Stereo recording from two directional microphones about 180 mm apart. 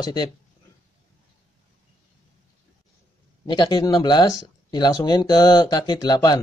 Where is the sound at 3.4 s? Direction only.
25° left (ahead or behind).